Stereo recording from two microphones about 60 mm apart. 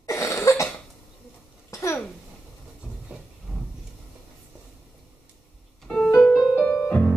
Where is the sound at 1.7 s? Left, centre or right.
Left.